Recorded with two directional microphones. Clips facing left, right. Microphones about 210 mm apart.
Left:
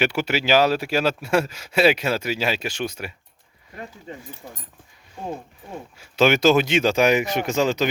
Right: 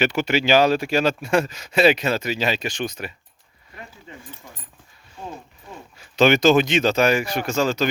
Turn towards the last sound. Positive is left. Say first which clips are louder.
# left 1 dB
turn(degrees=15)  # may be behind; listen again after turning